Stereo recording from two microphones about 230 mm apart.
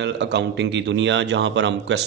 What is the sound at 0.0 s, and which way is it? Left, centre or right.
A man's voice, right.